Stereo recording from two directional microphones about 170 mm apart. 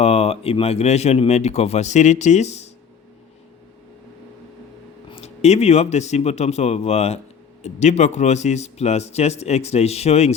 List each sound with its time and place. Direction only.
0.0 s a man's voice: 35° left (ahead or behind)
5.1 s a man's voice: 40° left (ahead or behind)